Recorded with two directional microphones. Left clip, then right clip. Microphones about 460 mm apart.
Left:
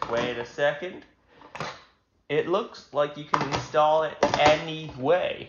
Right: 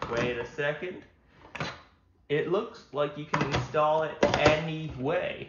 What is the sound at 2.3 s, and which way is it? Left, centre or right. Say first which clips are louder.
Speech: left 3 dB; centre.